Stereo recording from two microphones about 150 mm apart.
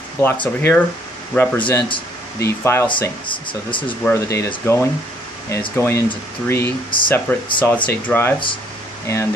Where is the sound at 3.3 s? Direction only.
35° left (ahead or behind).